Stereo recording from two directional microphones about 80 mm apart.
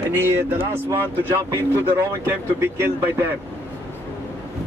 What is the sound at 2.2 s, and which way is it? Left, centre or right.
Speech, right.